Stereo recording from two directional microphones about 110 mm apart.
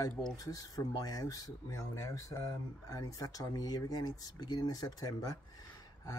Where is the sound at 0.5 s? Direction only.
35° left (ahead or behind).